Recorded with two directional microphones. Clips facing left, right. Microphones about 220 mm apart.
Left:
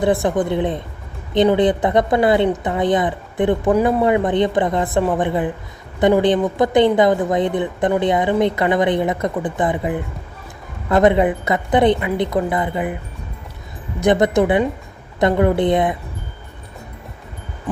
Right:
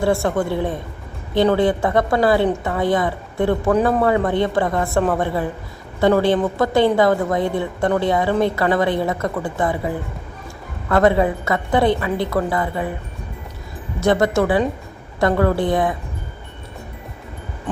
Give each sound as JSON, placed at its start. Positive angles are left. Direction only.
{"t": 0.0, "sound": "a woman's voice", "side_deg": 20}
{"t": 14.0, "sound": "a woman's voice", "side_deg": 20}